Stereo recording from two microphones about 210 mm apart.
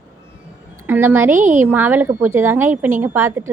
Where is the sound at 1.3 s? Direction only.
35° right (ahead or behind).